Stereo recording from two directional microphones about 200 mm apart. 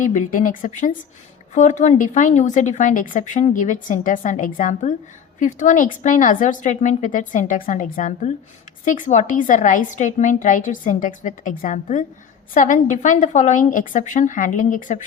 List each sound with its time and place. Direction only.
0.0 s speech: 40° left (ahead or behind)